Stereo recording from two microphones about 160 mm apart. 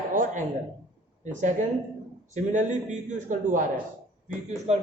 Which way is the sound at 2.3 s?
50° right (ahead or behind).